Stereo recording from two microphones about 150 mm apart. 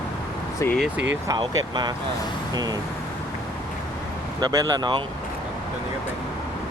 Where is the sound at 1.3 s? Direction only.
30° right (ahead or behind).